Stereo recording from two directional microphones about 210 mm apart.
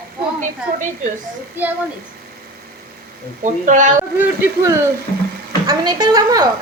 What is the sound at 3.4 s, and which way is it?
Speech, 35° right (ahead or behind).